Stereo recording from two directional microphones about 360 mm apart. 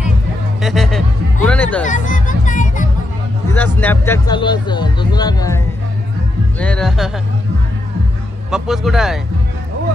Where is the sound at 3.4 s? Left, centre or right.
Centre.